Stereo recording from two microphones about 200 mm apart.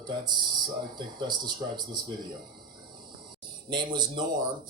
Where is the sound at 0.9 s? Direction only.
20° right (ahead or behind).